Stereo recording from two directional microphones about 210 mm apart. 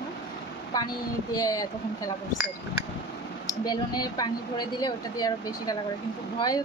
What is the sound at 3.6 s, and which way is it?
A woman's voice, 20° left (ahead or behind).